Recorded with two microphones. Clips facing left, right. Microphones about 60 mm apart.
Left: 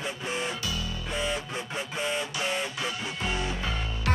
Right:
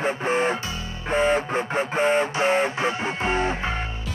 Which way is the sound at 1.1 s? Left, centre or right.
Right.